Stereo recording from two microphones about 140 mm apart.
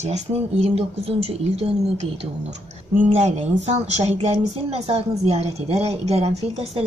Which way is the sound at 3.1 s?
50° right (ahead or behind).